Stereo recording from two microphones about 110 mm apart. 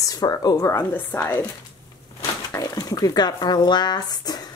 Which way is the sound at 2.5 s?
35° left (ahead or behind).